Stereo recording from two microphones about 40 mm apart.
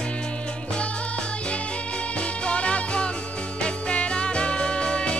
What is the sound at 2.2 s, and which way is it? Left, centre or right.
Music, left.